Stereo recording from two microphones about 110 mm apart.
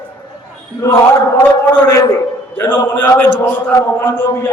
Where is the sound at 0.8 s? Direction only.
25° left (ahead or behind).